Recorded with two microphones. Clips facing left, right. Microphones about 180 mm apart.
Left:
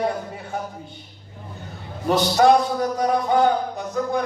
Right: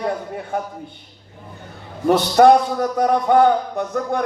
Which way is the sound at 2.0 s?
55° right (ahead or behind).